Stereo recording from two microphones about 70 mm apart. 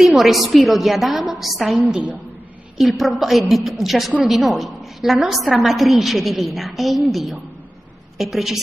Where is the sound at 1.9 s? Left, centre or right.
Right.